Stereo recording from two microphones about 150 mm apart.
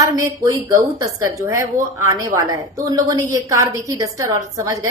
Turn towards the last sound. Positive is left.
turn(degrees=-20)  # may be behind; listen again after turning